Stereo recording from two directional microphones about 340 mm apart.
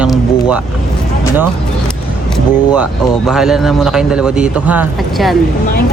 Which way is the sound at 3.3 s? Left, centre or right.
Centre.